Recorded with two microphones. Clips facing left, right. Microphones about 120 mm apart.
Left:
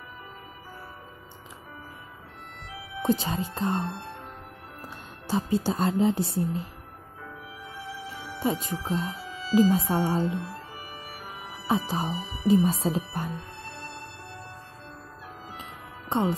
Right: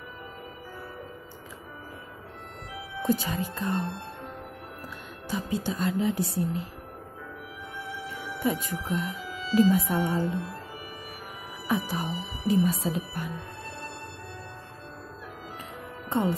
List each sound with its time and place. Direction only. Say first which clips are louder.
3.1 s a woman's voice: left 1 dB; 25° left (ahead or behind)
8.1 s speech: even; 25° left (ahead or behind)
11.6 s speech: left 2 dB; 25° left (ahead or behind)
16.1 s speech: left 1 dB; 20° left (ahead or behind)